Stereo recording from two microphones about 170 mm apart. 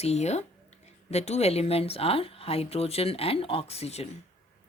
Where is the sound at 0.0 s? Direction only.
40° left (ahead or behind).